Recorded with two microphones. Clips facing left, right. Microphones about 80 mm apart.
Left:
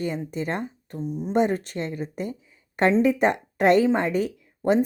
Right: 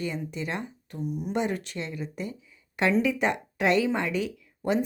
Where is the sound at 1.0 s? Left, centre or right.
Left.